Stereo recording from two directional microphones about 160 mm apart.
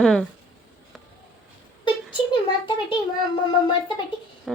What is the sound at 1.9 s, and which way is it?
A child's voice, 30° left (ahead or behind).